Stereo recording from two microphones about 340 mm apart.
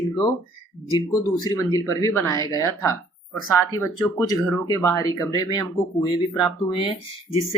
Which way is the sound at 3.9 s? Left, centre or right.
Centre.